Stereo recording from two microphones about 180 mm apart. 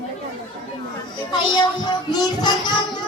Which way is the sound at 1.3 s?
25° left (ahead or behind).